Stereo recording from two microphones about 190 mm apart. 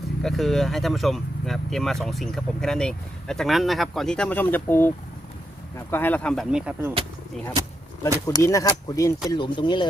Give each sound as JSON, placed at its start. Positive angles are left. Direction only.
{"t": 0.2, "sound": "speech", "side_deg": 0}
{"t": 5.9, "sound": "speech", "side_deg": 10}
{"t": 8.3, "sound": "speech", "side_deg": 15}